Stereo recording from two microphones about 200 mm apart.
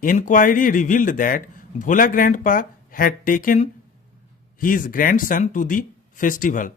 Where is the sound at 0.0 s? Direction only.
40° left (ahead or behind).